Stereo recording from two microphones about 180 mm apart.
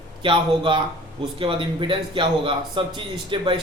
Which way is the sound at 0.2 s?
25° right (ahead or behind).